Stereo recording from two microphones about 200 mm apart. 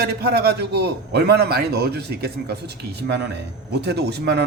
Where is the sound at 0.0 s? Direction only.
50° right (ahead or behind).